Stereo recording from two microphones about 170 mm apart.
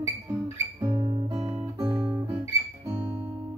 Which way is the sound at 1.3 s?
20° right (ahead or behind).